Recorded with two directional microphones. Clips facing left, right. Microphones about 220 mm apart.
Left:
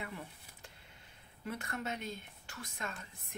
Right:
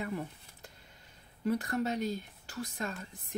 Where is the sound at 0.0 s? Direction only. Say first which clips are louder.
Right 8 dB; 40° right (ahead or behind).